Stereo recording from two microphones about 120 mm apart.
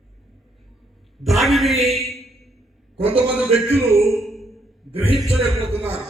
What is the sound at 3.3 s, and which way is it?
Speech, 10° right (ahead or behind).